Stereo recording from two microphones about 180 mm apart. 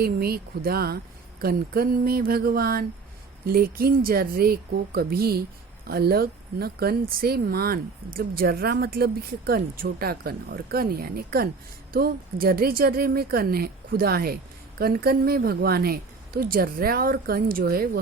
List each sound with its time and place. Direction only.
0.0 s a woman's voice: 55° right (ahead or behind)